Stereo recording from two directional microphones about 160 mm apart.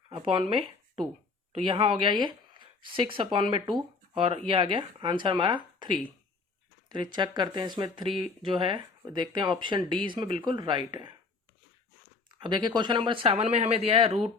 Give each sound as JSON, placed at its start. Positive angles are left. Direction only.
{"t": 1.5, "sound": "speech", "side_deg": -30}
{"t": 12.4, "sound": "speech", "side_deg": -30}